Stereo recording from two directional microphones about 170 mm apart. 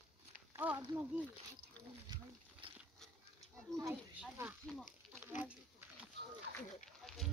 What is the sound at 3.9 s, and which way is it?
Speech, 10° right (ahead or behind).